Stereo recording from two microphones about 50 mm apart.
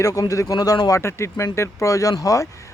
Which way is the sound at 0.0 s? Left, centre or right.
Left.